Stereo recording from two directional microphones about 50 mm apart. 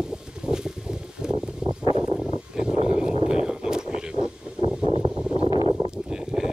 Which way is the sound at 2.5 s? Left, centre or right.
Centre.